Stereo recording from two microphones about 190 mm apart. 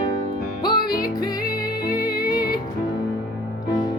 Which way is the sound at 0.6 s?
25° left (ahead or behind).